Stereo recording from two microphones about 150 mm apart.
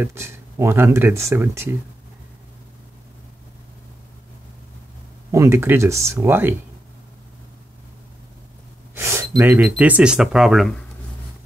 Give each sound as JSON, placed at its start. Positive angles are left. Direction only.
{"t": 0.0, "sound": "speech", "side_deg": -15}
{"t": 5.3, "sound": "speech", "side_deg": -15}
{"t": 8.9, "sound": "gasp", "side_deg": -20}
{"t": 9.4, "sound": "speech", "side_deg": -10}